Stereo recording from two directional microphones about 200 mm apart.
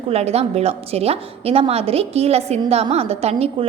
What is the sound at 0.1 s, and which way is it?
A woman's voice, 30° right (ahead or behind).